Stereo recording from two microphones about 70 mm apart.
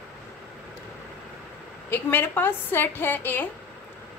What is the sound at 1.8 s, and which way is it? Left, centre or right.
Speech, left.